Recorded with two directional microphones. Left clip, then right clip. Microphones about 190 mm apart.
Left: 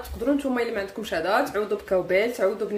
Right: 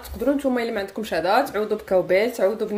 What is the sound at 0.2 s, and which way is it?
A woman's voice, 40° right (ahead or behind).